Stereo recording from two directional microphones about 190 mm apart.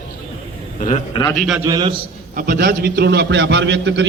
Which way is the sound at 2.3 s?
50° right (ahead or behind).